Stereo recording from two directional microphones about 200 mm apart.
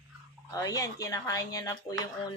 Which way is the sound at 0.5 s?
15° left (ahead or behind).